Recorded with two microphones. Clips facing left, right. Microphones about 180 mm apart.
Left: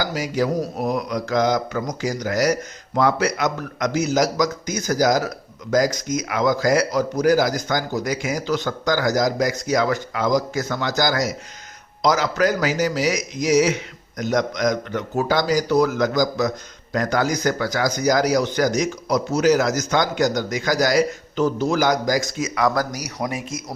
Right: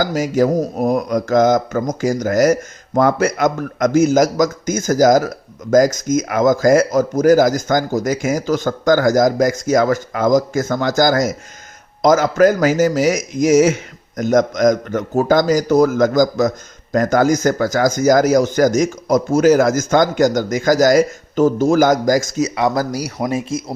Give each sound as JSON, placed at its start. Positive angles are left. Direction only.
{"t": 0.0, "sound": "speech", "side_deg": -45}
{"t": 22.6, "sound": "speech", "side_deg": -25}